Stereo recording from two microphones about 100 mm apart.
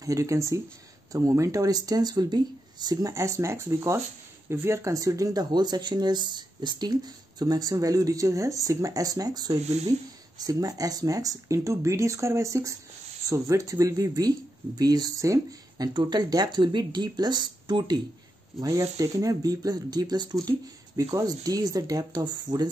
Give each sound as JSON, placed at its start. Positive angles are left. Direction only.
{"t": 0.0, "sound": "speech", "side_deg": -30}
{"t": 9.7, "sound": "speech", "side_deg": -90}
{"t": 10.4, "sound": "speech", "side_deg": -40}
{"t": 15.9, "sound": "speech", "side_deg": -45}
{"t": 18.6, "sound": "speech", "side_deg": -35}